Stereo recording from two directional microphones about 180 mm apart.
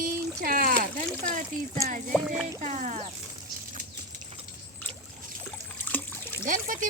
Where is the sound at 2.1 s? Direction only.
Centre (ahead or behind).